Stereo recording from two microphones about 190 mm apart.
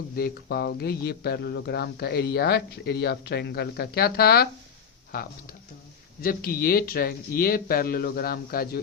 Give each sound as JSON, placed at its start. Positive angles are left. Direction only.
{"t": 0.2, "sound": "speech", "side_deg": 55}
{"t": 6.2, "sound": "speech", "side_deg": 50}